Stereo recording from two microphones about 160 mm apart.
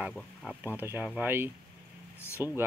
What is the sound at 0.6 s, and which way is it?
Speech, 10° right (ahead or behind).